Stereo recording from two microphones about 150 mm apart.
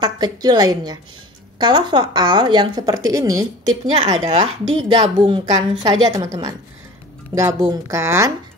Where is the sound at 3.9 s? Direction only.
45° right (ahead or behind).